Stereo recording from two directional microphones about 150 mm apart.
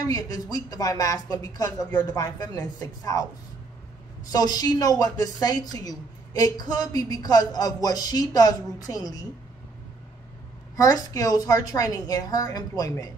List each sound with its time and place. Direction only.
0.0 s a woman's voice: 25° left (ahead or behind)
4.3 s a woman's voice: 25° left (ahead or behind)
10.8 s a woman's voice: 25° left (ahead or behind)